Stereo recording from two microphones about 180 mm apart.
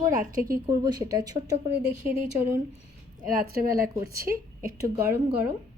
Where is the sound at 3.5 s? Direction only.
55° right (ahead or behind).